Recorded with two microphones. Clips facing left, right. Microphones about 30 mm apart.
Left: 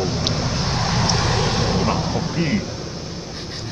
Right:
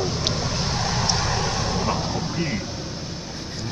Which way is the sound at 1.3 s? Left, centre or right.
Left.